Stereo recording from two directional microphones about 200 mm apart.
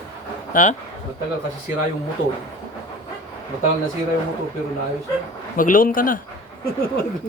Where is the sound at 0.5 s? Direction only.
40° left (ahead or behind).